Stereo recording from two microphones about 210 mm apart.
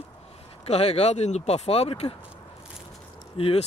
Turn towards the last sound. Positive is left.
turn(degrees=30)  # may be behind; listen again after turning